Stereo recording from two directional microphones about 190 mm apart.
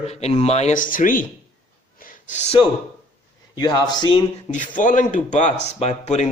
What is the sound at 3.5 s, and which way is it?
Speech, 20° left (ahead or behind).